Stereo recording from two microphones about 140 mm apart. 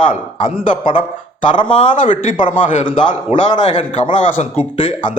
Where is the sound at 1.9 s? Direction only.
65° left (ahead or behind).